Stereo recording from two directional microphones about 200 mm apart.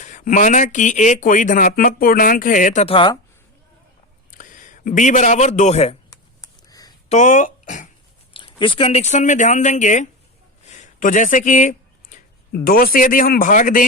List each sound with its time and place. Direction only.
0.0 s speech: 40° left (ahead or behind)
4.3 s a man's voice: 40° left (ahead or behind)
6.1 s a sound: 15° left (ahead or behind)
7.1 s speech: 40° left (ahead or behind)
8.3 s speech: 25° left (ahead or behind)
10.7 s a sound: 40° left (ahead or behind)
12.6 s speech: 45° left (ahead or behind)